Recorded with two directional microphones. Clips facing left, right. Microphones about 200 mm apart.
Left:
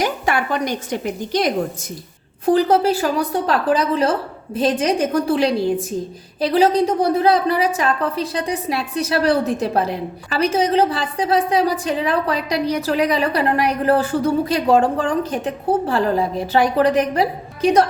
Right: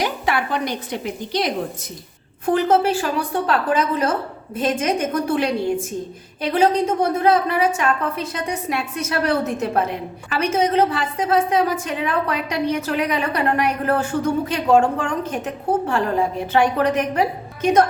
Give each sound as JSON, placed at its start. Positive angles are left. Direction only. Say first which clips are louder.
{"t": 0.0, "sound": "a woman's voice", "louder": "left 2 dB", "side_deg": 45}
{"t": 2.5, "sound": "a woman's voice", "louder": "left 2 dB", "side_deg": 35}